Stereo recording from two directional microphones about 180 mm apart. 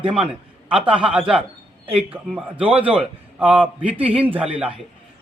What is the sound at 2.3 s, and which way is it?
A man's voice, 5° right (ahead or behind).